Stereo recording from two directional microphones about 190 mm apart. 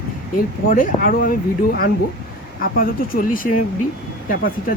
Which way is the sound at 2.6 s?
50° left (ahead or behind).